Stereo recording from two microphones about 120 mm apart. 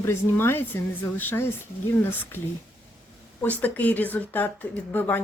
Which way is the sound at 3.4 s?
15° left (ahead or behind).